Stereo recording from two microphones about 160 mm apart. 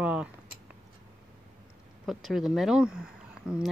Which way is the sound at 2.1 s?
Centre (ahead or behind).